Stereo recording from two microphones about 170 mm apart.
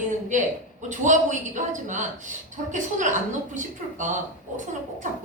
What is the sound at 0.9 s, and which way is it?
A woman's voice, 45° right (ahead or behind).